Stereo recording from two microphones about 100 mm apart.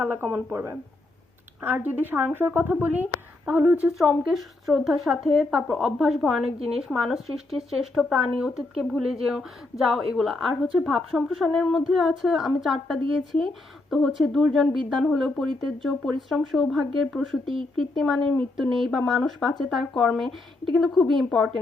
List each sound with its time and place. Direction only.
0.0 s speech: 25° right (ahead or behind)
3.8 s speech: 5° right (ahead or behind)